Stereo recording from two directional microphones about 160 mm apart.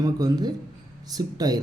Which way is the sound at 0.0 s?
25° right (ahead or behind).